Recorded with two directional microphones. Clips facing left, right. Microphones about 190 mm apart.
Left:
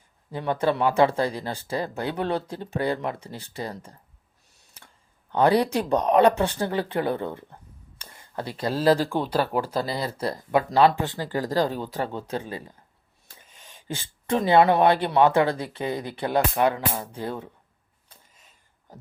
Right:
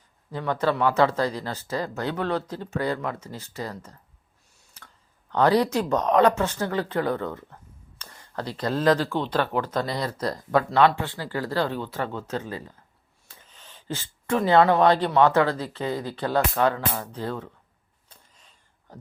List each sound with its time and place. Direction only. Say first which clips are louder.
0.3 s speech: left 1 dB; 15° left (ahead or behind)
5.3 s speech: even; 10° left (ahead or behind)
7.9 s a sound: even; 10° left (ahead or behind)
9.0 s speech: left 1 dB; 10° left (ahead or behind)
10.1 s speech: even; 25° left (ahead or behind)